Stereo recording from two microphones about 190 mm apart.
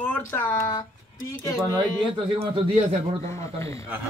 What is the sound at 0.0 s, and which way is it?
Speech, 10° left (ahead or behind).